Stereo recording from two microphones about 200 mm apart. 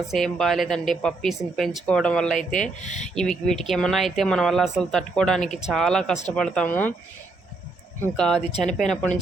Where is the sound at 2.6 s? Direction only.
35° left (ahead or behind).